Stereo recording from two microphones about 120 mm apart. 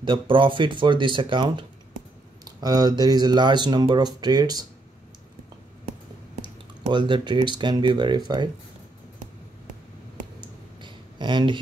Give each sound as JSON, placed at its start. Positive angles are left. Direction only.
{"t": 0.0, "sound": "speech", "side_deg": -45}
{"t": 6.9, "sound": "speech", "side_deg": -40}
{"t": 10.4, "sound": "a sound", "side_deg": -40}